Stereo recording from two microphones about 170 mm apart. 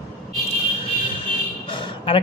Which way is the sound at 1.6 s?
30° left (ahead or behind).